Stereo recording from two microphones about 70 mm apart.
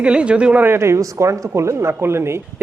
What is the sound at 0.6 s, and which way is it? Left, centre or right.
A woman's voice, right.